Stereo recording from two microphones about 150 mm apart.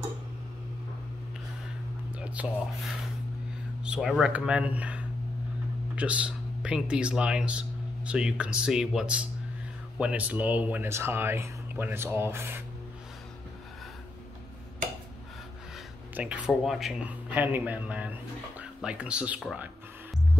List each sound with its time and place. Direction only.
2.1 s a sound: 10° right (ahead or behind)
3.8 s speech: 5° right (ahead or behind)
16.2 s speech: 10° right (ahead or behind)